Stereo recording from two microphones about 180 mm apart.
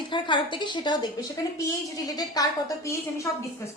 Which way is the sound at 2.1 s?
20° left (ahead or behind).